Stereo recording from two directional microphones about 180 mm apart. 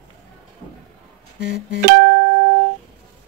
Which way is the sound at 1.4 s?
60° left (ahead or behind).